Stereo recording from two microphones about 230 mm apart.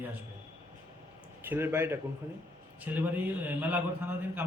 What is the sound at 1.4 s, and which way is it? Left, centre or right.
A man's voice, centre.